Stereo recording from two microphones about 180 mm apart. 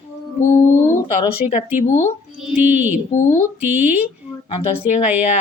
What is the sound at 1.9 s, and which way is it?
Speech, 15° left (ahead or behind).